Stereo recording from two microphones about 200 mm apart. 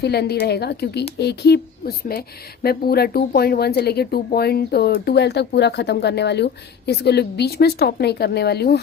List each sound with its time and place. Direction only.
0.0 s speech: 55° left (ahead or behind)